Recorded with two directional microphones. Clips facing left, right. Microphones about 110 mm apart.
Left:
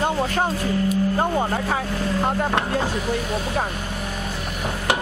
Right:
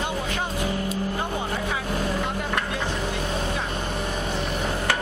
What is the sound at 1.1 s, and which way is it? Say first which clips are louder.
Speech: left 6 dB; 45° left (ahead or behind).